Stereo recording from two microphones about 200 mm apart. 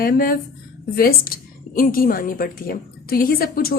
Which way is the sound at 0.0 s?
45° left (ahead or behind).